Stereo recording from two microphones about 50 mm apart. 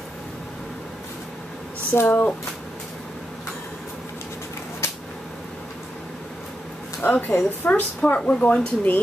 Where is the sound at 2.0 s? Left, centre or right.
Left.